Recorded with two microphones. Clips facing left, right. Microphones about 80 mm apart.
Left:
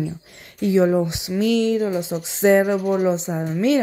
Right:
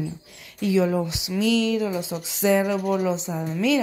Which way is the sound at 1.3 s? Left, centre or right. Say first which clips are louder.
Left 3 dB; left.